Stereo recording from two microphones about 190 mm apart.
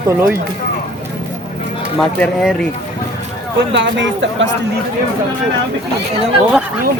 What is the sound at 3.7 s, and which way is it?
Speech, 75° right (ahead or behind).